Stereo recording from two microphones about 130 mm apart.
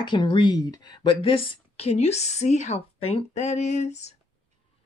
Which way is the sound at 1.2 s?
45° left (ahead or behind).